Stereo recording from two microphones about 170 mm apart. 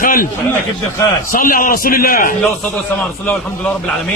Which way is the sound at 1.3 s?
55° left (ahead or behind).